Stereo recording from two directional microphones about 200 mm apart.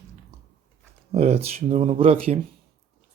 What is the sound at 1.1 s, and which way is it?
Speech, 30° right (ahead or behind).